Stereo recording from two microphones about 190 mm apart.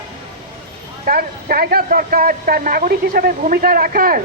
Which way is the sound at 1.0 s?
50° right (ahead or behind).